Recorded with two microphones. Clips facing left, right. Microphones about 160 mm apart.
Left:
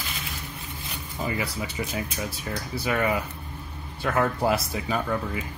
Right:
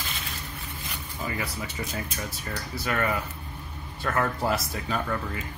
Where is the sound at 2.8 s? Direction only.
15° left (ahead or behind).